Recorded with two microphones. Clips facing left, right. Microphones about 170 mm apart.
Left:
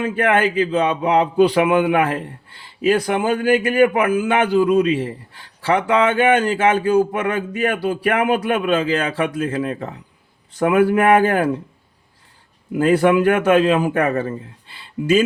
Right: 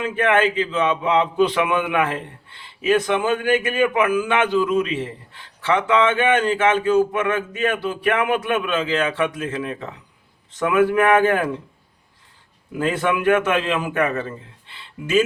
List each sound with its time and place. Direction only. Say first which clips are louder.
0.0 s a man's voice: left 1 dB; 35° left (ahead or behind)
5.6 s a man's voice: left 1 dB; 35° left (ahead or behind)
12.8 s a man's voice: left 6 dB; 35° left (ahead or behind)